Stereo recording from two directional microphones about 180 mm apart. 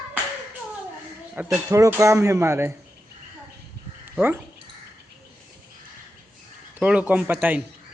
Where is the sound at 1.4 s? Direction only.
15° right (ahead or behind).